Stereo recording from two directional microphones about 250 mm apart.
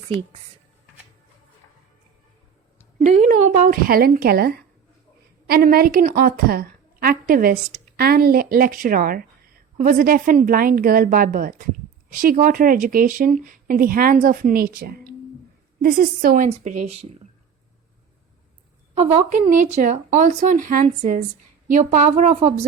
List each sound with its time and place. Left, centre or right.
3.7 s a woman's voice: right
19.1 s a woman's voice: right